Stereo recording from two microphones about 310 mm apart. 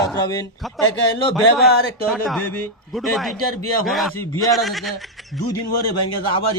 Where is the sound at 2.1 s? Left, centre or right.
Centre.